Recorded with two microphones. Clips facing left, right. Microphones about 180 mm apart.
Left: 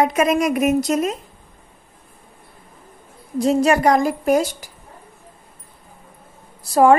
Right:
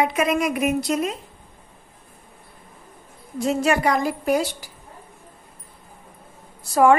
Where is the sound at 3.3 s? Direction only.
35° left (ahead or behind).